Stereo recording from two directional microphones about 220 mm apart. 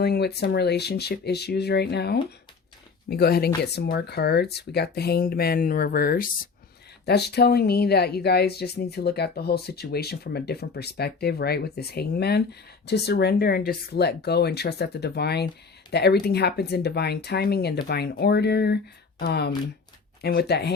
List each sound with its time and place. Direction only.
0.0 s speech: 45° left (ahead or behind)